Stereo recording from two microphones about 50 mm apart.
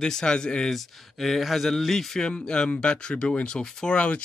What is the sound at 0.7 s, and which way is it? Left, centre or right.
Speech, centre.